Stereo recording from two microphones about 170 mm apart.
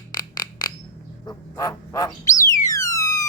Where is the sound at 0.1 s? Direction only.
25° left (ahead or behind).